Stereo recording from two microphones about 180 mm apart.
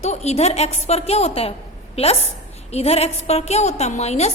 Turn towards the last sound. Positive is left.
turn(degrees=35)  # may be behind; listen again after turning